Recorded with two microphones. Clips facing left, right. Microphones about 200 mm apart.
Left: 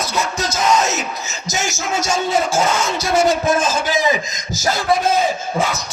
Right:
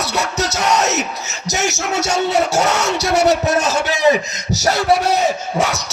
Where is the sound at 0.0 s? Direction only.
70° right (ahead or behind).